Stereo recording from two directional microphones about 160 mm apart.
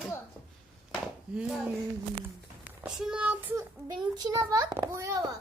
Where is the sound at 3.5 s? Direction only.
25° right (ahead or behind).